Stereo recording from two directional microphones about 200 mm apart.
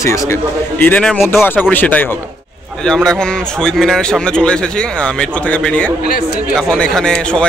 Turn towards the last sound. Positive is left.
turn(degrees=5)  # may be behind; listen again after turning